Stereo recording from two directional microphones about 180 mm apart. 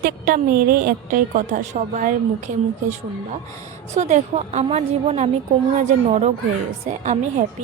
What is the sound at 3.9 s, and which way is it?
A woman's voice, 40° right (ahead or behind).